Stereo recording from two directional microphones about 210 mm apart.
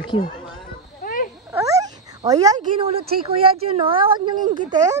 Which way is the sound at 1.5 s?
15° right (ahead or behind).